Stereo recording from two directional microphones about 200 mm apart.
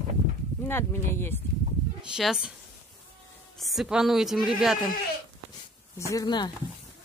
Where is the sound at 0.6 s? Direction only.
10° left (ahead or behind).